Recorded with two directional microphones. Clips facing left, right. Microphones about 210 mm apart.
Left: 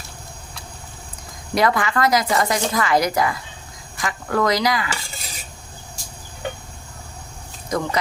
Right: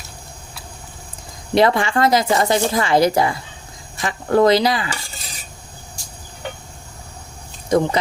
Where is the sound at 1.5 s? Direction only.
25° right (ahead or behind).